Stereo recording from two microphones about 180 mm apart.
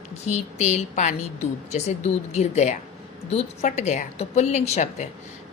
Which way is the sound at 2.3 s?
40° left (ahead or behind).